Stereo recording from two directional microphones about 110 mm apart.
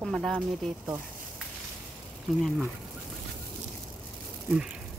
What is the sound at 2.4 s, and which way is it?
Speech, centre (ahead or behind).